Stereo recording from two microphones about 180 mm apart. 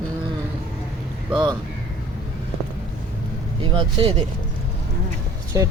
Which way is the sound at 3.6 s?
30° right (ahead or behind).